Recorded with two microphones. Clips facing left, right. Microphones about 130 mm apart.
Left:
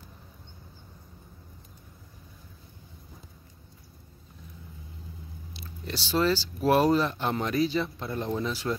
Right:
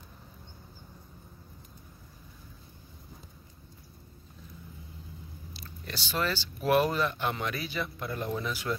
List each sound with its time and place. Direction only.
5.6 s speech: 30° left (ahead or behind)